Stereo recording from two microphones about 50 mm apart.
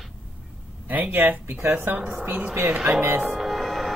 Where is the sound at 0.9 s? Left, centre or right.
Right.